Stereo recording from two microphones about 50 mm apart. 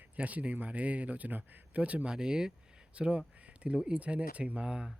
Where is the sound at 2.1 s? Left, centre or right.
Centre.